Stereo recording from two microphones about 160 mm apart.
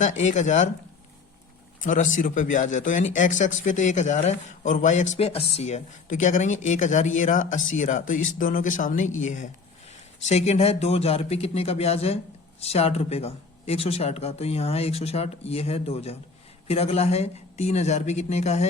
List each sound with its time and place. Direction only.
0.0 s speech: 50° left (ahead or behind)
1.8 s speech: 55° left (ahead or behind)